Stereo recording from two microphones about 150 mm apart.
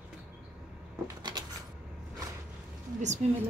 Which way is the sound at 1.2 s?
30° right (ahead or behind).